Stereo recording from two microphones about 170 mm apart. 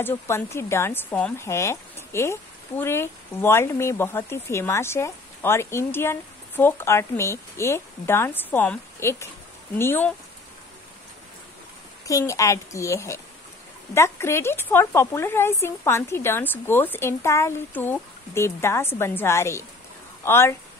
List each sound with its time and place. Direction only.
0.0 s speech: 15° left (ahead or behind)
12.1 s speech: 20° left (ahead or behind)